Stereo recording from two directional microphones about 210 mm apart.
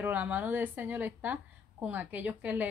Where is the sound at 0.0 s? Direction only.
10° right (ahead or behind).